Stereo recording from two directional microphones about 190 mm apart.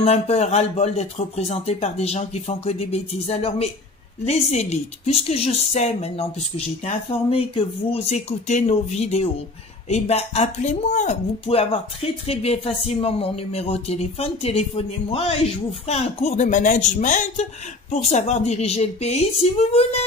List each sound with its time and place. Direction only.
0.0 s speech: 35° left (ahead or behind)